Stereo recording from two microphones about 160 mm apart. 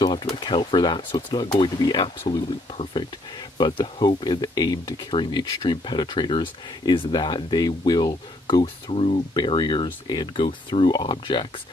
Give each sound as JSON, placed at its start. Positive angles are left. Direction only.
{"t": 0.0, "sound": "speech", "side_deg": 25}